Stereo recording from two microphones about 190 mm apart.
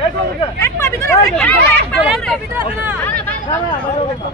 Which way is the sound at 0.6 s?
15° left (ahead or behind).